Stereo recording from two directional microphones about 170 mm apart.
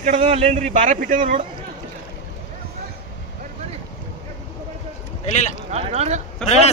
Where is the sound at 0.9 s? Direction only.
50° right (ahead or behind).